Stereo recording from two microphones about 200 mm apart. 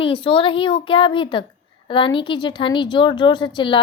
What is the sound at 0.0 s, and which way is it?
A woman's voice, 25° left (ahead or behind).